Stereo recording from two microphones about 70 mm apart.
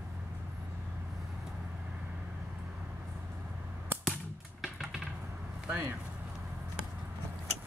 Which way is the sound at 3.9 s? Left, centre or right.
Right.